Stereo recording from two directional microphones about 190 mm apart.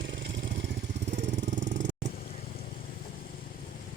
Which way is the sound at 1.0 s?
40° right (ahead or behind).